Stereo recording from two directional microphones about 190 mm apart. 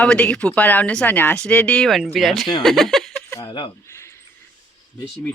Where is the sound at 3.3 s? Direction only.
25° left (ahead or behind).